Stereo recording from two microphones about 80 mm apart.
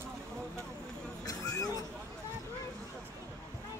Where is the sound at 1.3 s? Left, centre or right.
Left.